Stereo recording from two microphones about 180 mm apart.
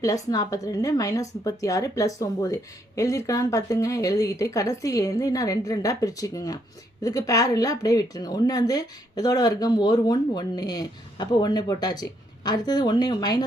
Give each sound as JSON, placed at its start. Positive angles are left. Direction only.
{"t": 0.0, "sound": "a woman's voice", "side_deg": 20}